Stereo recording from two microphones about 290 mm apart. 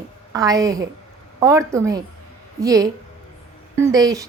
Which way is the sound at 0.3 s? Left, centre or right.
Centre.